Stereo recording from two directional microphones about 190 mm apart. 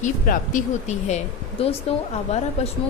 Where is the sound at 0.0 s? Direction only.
40° left (ahead or behind).